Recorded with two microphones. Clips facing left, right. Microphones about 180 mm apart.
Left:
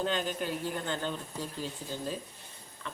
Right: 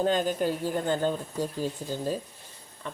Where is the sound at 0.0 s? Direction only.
45° right (ahead or behind).